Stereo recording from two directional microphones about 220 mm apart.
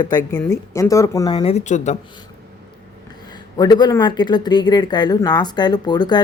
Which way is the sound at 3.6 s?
15° left (ahead or behind).